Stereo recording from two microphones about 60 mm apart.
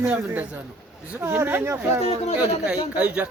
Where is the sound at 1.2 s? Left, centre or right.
Right.